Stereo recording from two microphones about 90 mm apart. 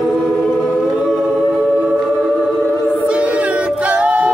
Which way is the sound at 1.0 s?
5° right (ahead or behind).